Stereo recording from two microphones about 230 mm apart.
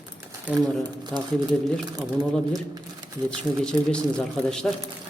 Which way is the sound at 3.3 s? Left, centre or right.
Centre.